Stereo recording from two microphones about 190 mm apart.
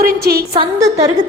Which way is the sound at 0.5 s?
30° right (ahead or behind).